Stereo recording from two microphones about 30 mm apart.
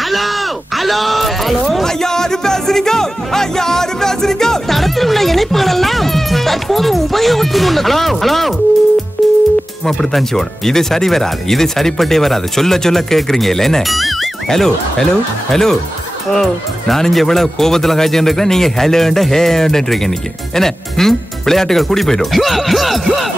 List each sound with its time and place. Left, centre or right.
0.0 s a sound: centre
1.9 s music: centre
4.7 s music: centre
9.8 s speech: centre
13.8 s speech: centre
14.5 s speech: centre